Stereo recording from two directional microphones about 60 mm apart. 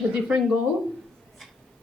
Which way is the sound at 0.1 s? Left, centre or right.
Centre.